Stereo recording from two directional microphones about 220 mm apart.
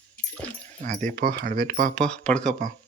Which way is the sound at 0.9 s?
35° right (ahead or behind).